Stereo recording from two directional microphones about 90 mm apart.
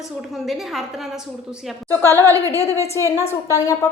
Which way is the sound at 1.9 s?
40° right (ahead or behind).